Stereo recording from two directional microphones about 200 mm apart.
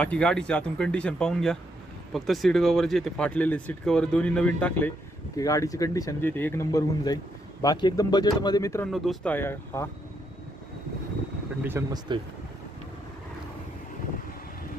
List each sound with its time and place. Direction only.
0.0 s speech: 5° left (ahead or behind)
5.4 s speech: 15° left (ahead or behind)
8.9 s speech: 5° left (ahead or behind)
11.6 s speech: 10° right (ahead or behind)